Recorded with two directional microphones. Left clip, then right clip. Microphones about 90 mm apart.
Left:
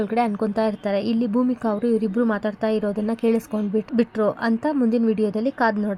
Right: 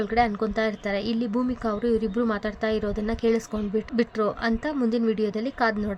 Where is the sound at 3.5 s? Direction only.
20° left (ahead or behind).